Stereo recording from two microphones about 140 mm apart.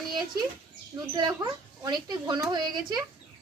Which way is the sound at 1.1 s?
30° right (ahead or behind).